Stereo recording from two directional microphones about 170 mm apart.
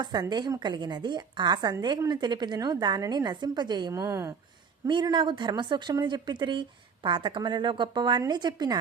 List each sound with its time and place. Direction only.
0.0 s a woman's voice: 25° right (ahead or behind)
4.9 s a woman's voice: 25° right (ahead or behind)